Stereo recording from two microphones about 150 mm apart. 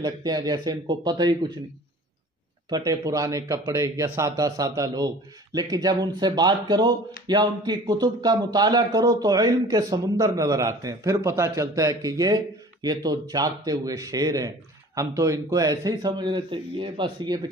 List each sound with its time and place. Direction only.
0.0 s speech: 25° right (ahead or behind)
2.7 s speech: 20° right (ahead or behind)